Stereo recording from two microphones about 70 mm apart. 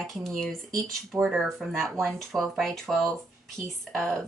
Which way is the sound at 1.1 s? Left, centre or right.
Centre.